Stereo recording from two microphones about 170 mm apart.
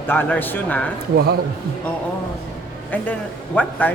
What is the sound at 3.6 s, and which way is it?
Speech, 10° left (ahead or behind).